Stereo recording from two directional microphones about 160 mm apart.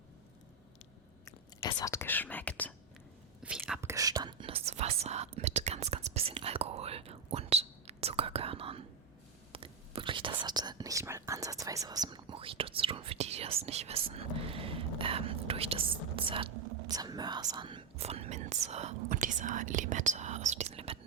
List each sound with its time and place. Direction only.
1.2 s speech: 20° left (ahead or behind)
3.4 s whispering: 5° right (ahead or behind)
3.8 s whispering: 20° right (ahead or behind)
10.4 s speech: 25° right (ahead or behind); by 18.9 s 45° right (ahead or behind)
19.0 s speech: 55° right (ahead or behind); by 21.0 s 40° right (ahead or behind)